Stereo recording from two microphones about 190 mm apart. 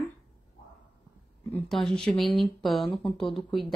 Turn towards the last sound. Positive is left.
turn(degrees=0)  # may be behind; listen again after turning